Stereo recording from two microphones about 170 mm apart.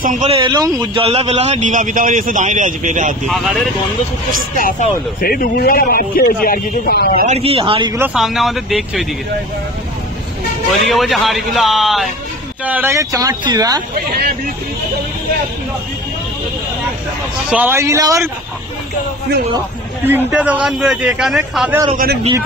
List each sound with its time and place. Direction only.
0.0 s a man's voice: 50° right (ahead or behind)
0.3 s speech: 30° right (ahead or behind)
1.0 s a man's voice: 35° right (ahead or behind)
3.3 s speech: centre (ahead or behind)
4.6 s speech: 55° left (ahead or behind)
7.2 s speech: 35° right (ahead or behind)
8.0 s speech: 5° right (ahead or behind)
10.9 s speech: centre (ahead or behind)
12.6 s speech: 10° right (ahead or behind)
17.5 s a man's voice: 10° right (ahead or behind)
20.1 s a man's voice: 10° right (ahead or behind)
21.9 s speech: 65° right (ahead or behind)